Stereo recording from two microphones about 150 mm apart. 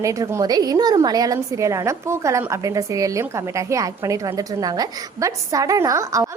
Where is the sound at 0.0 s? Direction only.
20° right (ahead or behind).